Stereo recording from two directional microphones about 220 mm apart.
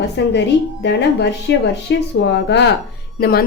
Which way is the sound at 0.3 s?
50° left (ahead or behind).